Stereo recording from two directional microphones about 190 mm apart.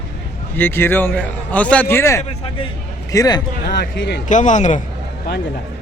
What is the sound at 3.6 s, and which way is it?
Speech, 60° left (ahead or behind).